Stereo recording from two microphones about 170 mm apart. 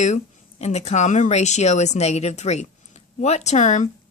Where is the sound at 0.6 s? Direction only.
40° left (ahead or behind).